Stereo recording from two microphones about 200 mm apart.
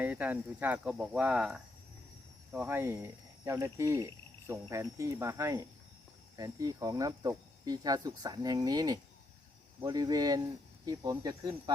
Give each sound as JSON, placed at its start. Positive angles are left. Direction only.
{"t": 0.0, "sound": "speech", "side_deg": -10}